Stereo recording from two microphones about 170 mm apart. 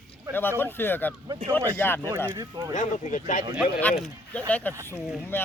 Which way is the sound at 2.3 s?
20° right (ahead or behind).